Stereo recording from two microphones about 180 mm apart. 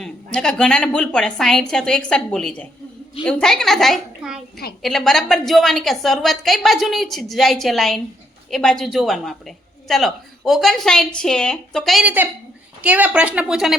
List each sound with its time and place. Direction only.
0.0 s a woman's voice: 5° left (ahead or behind)